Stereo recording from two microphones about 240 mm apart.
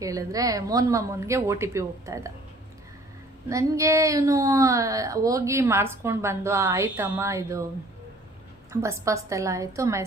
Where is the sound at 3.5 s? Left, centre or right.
Centre.